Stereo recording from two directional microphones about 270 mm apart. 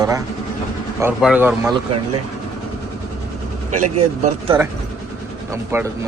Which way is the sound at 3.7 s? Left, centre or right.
Right.